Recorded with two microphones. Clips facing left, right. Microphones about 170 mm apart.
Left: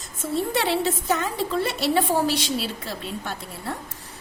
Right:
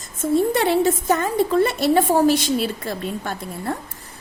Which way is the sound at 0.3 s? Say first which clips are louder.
Right 6 dB; 50° right (ahead or behind).